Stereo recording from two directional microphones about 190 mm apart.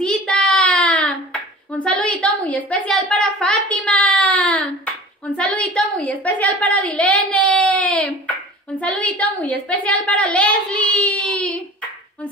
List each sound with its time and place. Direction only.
0.0 s hands: 5° left (ahead or behind)